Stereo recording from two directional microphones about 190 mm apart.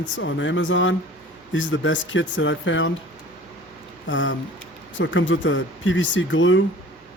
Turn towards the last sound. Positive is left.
turn(degrees=85)